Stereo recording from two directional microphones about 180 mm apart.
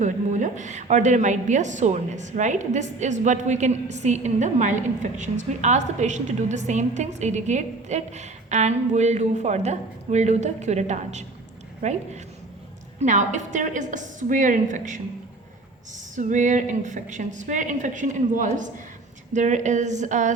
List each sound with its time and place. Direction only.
0.0 s a woman's voice: 45° right (ahead or behind)